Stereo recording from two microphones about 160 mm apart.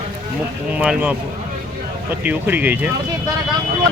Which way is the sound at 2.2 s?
10° right (ahead or behind).